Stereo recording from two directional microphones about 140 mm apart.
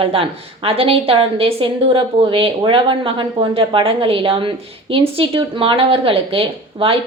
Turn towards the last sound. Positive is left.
turn(degrees=-40)  # may be behind; listen again after turning